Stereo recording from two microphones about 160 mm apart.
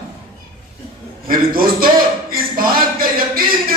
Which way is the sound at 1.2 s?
65° right (ahead or behind).